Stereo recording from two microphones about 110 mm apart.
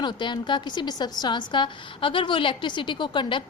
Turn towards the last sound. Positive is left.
turn(degrees=45)  # may be behind; listen again after turning